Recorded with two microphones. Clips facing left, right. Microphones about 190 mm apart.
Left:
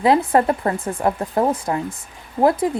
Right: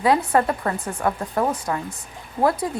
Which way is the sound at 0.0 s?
25° left (ahead or behind).